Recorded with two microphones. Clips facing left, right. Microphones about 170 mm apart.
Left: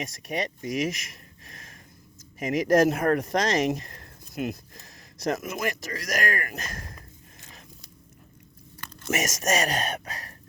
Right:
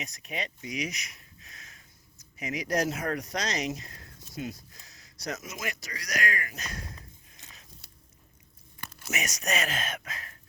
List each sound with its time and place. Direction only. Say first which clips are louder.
0.3 s speech: left 7 dB; 45° left (ahead or behind)
2.4 s speech: left 9 dB; 45° left (ahead or behind)
4.4 s speech: left 6 dB; 65° left (ahead or behind)
9.0 s speech: left 7 dB; 45° left (ahead or behind)